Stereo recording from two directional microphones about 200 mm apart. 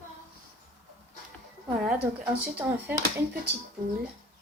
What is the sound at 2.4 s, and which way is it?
Speech, 10° right (ahead or behind).